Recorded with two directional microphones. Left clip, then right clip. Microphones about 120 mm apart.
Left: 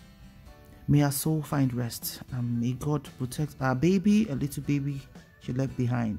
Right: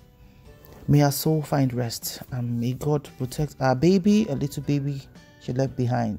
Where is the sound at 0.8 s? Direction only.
30° right (ahead or behind).